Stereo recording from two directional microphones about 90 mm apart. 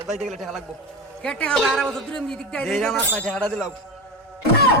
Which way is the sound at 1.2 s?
10° left (ahead or behind).